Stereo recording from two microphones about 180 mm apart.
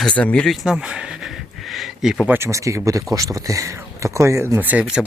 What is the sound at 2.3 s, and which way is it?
Speech, 15° right (ahead or behind).